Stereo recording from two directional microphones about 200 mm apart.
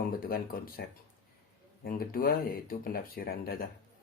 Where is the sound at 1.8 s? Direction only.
45° left (ahead or behind).